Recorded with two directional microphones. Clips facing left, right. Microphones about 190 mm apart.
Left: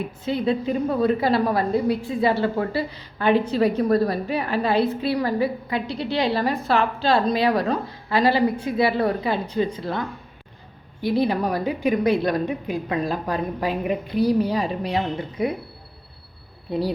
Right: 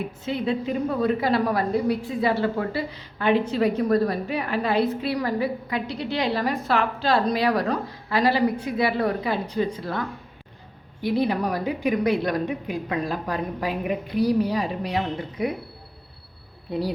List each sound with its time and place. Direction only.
0.3 s a woman's voice: 35° left (ahead or behind)
16.7 s a woman's voice: 30° left (ahead or behind)